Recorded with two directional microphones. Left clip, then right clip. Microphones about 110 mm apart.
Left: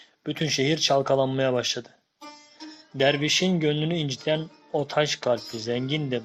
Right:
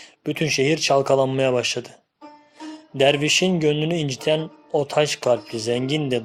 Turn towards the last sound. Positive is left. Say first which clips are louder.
# right 5 dB
turn(degrees=-35)  # may be behind; listen again after turning